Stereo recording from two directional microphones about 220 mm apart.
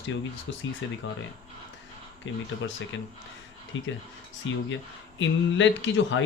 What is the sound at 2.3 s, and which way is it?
Speech, 60° left (ahead or behind).